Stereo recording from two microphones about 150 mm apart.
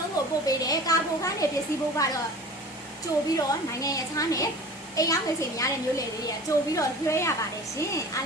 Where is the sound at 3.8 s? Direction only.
20° left (ahead or behind).